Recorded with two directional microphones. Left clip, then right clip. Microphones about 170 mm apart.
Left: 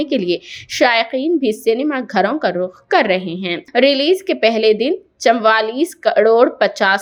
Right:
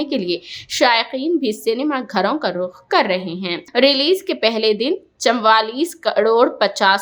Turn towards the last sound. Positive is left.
turn(degrees=10)  # may be behind; listen again after turning